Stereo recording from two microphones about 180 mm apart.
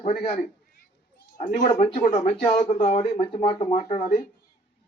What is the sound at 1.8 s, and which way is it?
Speech, 40° left (ahead or behind).